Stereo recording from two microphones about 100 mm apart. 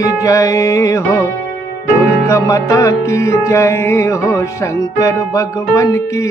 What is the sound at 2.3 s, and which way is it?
Mantra, 30° left (ahead or behind).